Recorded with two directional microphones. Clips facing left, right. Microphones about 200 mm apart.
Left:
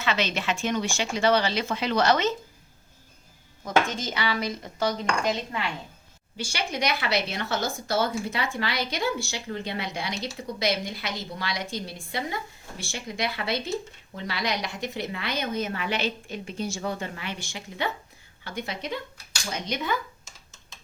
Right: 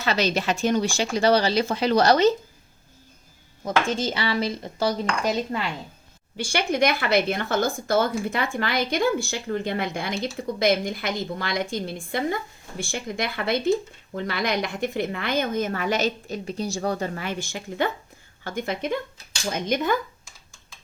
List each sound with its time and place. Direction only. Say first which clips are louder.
0.0 s speech: right 4 dB; 40° right (ahead or behind)
3.6 s speech: right 2 dB; 30° right (ahead or behind)
6.3 s speech: right 7 dB; 55° right (ahead or behind)